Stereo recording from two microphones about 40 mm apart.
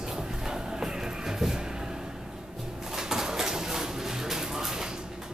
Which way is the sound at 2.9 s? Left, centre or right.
Centre.